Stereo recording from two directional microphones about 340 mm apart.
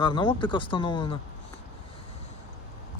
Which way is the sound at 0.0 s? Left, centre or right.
Centre.